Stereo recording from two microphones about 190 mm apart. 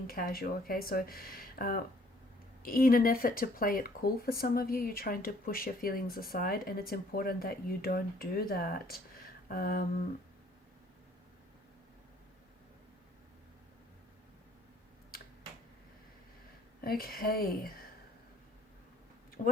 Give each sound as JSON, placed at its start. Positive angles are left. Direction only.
{"t": 0.1, "sound": "speech", "side_deg": 50}
{"t": 16.8, "sound": "speech", "side_deg": 50}